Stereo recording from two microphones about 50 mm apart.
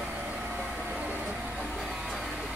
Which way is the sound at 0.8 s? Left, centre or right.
Right.